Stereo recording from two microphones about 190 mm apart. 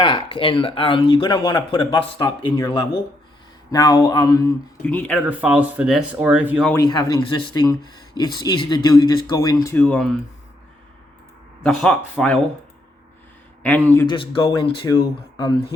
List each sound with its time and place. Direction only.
0.0 s speech: 25° left (ahead or behind); by 5.2 s 5° left (ahead or behind)
5.2 s speech: 5° right (ahead or behind)
6.7 s speech: 20° left (ahead or behind)
9.6 s speech: 10° left (ahead or behind)
11.6 s speech: 5° left (ahead or behind)
13.6 s speech: 10° left (ahead or behind)
14.1 s speech: 25° left (ahead or behind)